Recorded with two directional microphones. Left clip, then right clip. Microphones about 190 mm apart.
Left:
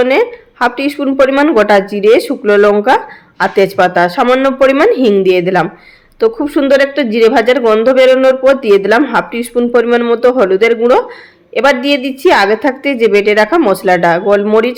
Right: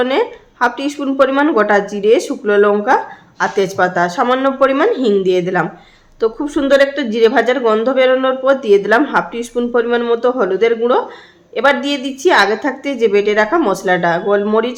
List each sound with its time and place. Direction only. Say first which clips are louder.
0.0 s speech: left 5 dB; 20° left (ahead or behind)